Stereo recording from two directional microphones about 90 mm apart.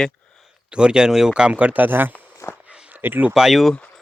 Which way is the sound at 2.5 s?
10° right (ahead or behind).